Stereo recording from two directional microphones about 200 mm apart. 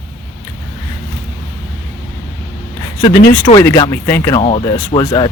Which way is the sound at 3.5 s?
20° left (ahead or behind).